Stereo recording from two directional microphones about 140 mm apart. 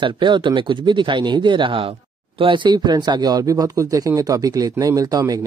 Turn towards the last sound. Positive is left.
turn(degrees=-25)  # may be behind; listen again after turning